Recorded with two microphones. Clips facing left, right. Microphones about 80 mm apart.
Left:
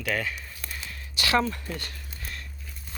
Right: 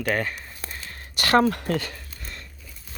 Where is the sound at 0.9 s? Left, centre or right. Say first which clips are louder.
Right 5 dB; right.